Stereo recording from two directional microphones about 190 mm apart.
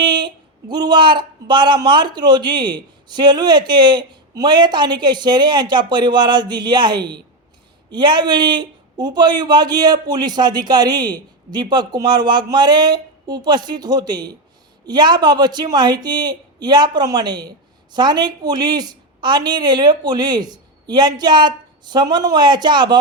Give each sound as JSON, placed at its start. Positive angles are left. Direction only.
{"t": 0.0, "sound": "speech", "side_deg": -25}